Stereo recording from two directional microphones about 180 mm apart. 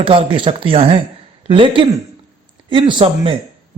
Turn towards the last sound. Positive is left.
turn(degrees=-30)  # may be behind; listen again after turning